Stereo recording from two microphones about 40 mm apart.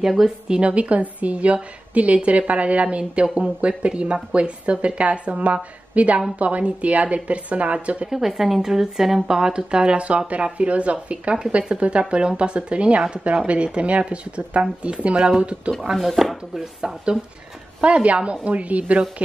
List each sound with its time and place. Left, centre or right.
0.0 s a woman's voice: centre
0.6 s a woman's voice: right
8.1 s a woman's voice: centre
9.5 s speech: right
16.1 s speech: centre
17.7 s a woman's voice: right